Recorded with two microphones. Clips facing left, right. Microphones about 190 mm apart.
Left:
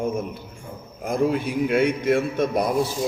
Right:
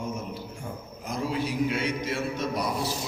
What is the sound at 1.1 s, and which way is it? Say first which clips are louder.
A man's voice: left 7 dB; 55° left (ahead or behind).